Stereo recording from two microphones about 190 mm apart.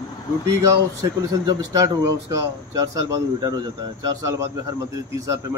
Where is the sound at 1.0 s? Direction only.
20° right (ahead or behind).